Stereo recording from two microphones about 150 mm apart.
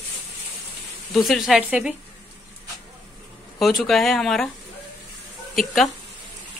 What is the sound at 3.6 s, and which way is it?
Speech, centre (ahead or behind).